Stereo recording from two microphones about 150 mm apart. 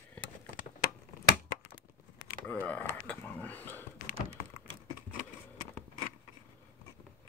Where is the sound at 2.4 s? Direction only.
10° left (ahead or behind).